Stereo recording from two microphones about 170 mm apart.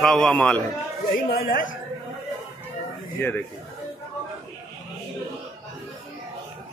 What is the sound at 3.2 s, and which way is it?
Speech, 10° left (ahead or behind).